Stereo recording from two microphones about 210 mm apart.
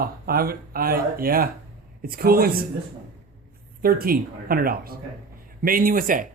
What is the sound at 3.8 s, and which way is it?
Speech, 45° right (ahead or behind).